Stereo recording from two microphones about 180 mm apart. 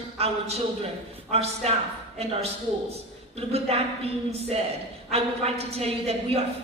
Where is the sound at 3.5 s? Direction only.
35° right (ahead or behind).